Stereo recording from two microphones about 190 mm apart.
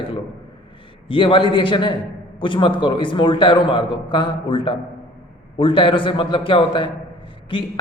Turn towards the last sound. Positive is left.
turn(degrees=25)  # may be behind; listen again after turning